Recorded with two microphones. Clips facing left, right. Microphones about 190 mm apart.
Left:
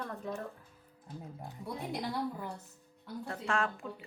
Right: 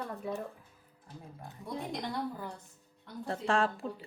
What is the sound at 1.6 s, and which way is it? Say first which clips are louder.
Speech: right 1 dB; 5° left (ahead or behind).